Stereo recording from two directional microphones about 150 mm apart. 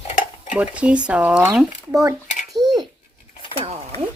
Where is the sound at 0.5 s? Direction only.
10° right (ahead or behind).